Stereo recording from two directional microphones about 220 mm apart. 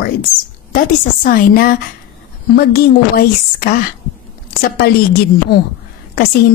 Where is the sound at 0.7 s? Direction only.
40° left (ahead or behind).